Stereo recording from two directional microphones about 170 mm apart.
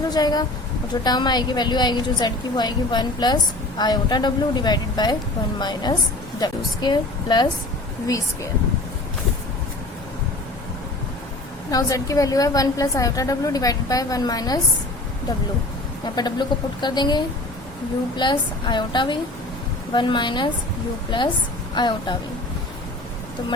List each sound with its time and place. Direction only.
0.1 s a woman's voice: 25° left (ahead or behind)
11.7 s a woman's voice: 20° left (ahead or behind)
16.0 s a woman's voice: 25° left (ahead or behind)